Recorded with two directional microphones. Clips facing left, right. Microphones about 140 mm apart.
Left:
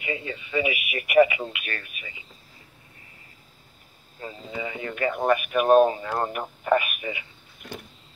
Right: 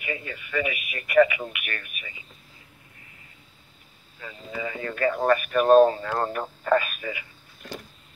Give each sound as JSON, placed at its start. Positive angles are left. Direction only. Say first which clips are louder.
{"t": 0.0, "sound": "speech", "louder": "left 2 dB", "side_deg": 25}
{"t": 0.7, "sound": "speech", "louder": "left 3 dB", "side_deg": 10}
{"t": 4.2, "sound": "speech", "louder": "left 4 dB", "side_deg": 35}
{"t": 4.5, "sound": "speech", "louder": "right 1 dB", "side_deg": 20}